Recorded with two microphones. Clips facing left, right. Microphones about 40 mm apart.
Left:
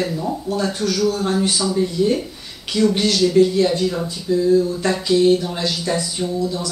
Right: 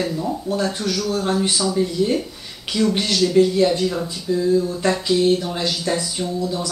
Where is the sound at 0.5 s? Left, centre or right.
Centre.